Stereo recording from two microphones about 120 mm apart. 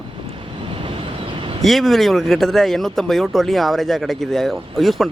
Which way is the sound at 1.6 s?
Centre (ahead or behind).